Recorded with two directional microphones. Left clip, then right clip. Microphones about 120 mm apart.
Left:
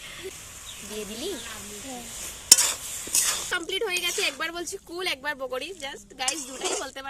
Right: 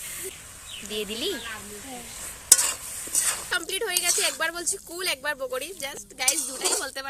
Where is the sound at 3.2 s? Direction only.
50° left (ahead or behind).